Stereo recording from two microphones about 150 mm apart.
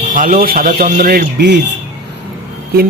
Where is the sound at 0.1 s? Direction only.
65° right (ahead or behind); by 1.5 s 80° right.